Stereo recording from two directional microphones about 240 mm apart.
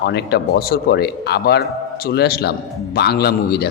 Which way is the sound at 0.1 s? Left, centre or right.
Left.